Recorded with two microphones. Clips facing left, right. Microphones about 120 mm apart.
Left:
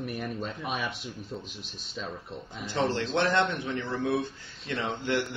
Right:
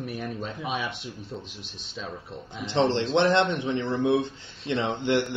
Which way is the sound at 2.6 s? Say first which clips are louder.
Right 5 dB; 25° right (ahead or behind).